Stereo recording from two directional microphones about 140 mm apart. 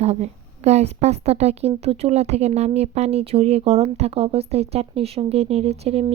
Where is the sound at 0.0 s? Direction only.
55° right (ahead or behind).